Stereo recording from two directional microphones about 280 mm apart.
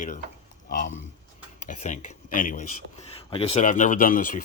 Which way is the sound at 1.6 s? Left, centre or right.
Left.